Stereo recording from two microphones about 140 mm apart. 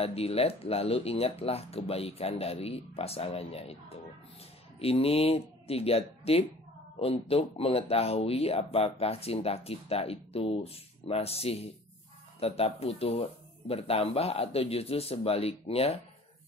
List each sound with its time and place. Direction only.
0.0 s speech: 45° left (ahead or behind)
4.7 s speech: 45° left (ahead or behind)